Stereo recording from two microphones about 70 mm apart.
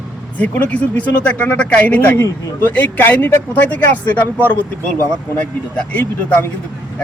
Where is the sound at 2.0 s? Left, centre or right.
Left; by 6.0 s centre.